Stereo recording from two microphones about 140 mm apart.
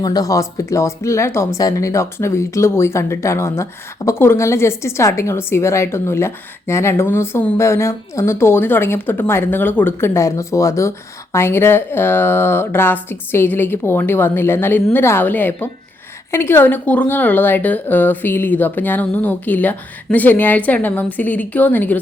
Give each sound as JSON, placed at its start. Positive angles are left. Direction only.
{"t": 0.0, "sound": "speech", "side_deg": 25}